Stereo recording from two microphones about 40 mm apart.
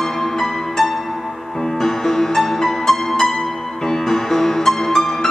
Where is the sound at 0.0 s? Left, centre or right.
Centre.